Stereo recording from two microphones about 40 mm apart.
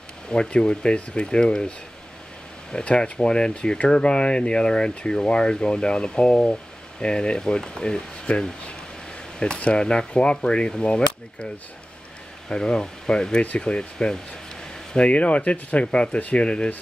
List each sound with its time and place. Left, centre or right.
0.3 s speech: left
2.7 s speech: left
9.6 s speech: left
12.4 s speech: left
15.0 s speech: left